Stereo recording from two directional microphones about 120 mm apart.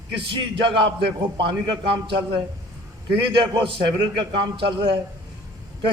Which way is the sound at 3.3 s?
45° right (ahead or behind).